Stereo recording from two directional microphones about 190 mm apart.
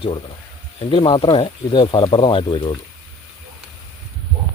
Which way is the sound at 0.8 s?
25° left (ahead or behind).